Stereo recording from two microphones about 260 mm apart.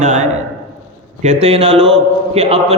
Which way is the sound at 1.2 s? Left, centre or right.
Right.